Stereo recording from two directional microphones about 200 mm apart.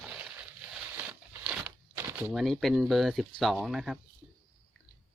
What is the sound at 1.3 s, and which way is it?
Speech, 10° right (ahead or behind).